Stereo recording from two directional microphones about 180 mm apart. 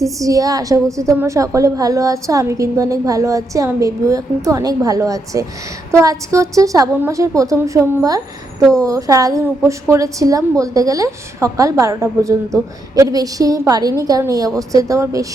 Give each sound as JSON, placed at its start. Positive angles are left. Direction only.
{"t": 0.0, "sound": "a woman's voice", "side_deg": -20}